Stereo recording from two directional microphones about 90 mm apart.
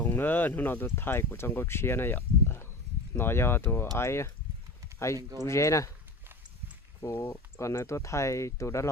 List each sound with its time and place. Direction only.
0.0 s speech: 20° left (ahead or behind)
5.1 s speech: 45° right (ahead or behind)
5.5 s speech: 35° left (ahead or behind)
7.0 s speech: 25° left (ahead or behind)